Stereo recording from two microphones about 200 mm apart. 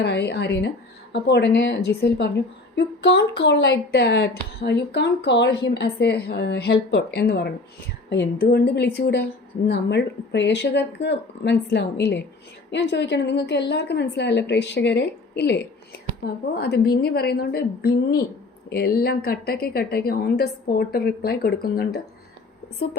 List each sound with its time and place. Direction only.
0.0 s a woman's voice: 55° left (ahead or behind)